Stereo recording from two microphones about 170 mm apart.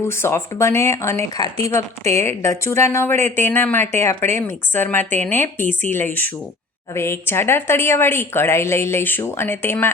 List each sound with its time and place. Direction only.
0.1 s speech: 15° left (ahead or behind)